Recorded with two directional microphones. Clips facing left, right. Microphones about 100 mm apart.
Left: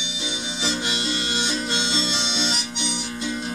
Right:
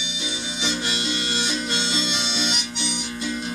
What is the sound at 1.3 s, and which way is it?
Music, 20° left (ahead or behind).